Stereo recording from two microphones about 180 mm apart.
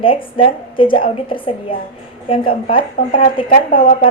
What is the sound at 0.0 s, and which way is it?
A woman's voice, 30° left (ahead or behind).